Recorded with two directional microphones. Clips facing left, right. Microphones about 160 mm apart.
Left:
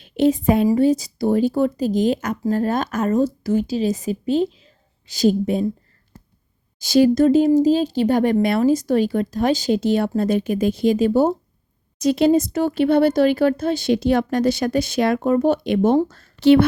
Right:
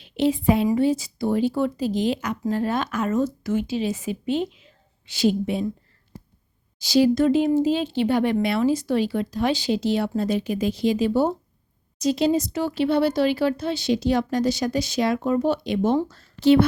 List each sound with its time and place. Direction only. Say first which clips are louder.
0.0 s a woman's voice: left 4 dB; 45° left (ahead or behind)
6.7 s speech: left 4 dB; 50° left (ahead or behind)
11.9 s speech: left 5 dB; 60° left (ahead or behind)